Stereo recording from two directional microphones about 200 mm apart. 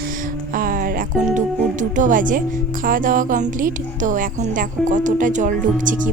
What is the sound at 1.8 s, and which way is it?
A woman's voice, 40° right (ahead or behind).